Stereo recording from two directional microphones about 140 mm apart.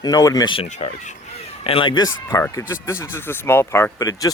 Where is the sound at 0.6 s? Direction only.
55° left (ahead or behind).